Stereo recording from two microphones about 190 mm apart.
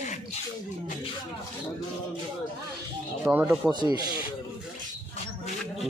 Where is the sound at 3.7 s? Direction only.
20° right (ahead or behind).